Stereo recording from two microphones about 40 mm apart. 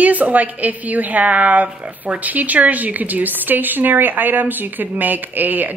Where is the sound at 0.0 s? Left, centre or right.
Right.